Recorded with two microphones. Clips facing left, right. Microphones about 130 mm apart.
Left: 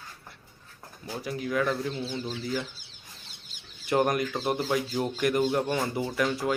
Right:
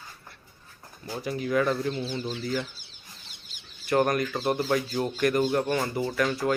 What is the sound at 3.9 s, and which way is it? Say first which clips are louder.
Speech: right 1 dB; 15° left (ahead or behind).